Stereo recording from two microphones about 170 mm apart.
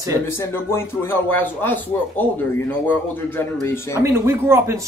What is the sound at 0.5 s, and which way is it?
Speech, 15° left (ahead or behind).